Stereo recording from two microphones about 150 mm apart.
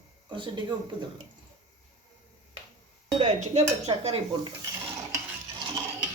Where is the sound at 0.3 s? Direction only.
30° right (ahead or behind).